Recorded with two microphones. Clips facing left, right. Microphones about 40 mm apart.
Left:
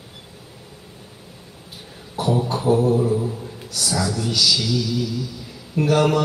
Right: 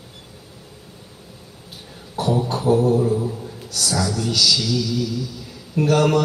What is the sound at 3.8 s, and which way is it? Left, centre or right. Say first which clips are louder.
Mantra: right 1 dB; centre.